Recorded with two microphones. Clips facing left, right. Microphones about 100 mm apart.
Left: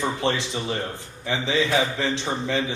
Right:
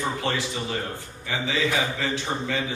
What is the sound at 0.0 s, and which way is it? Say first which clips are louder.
Speech: left 2 dB; 20° left (ahead or behind).